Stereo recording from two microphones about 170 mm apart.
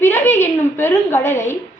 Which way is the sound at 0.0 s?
15° left (ahead or behind).